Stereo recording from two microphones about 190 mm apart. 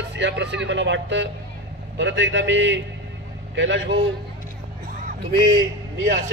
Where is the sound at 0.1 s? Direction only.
70° right (ahead or behind).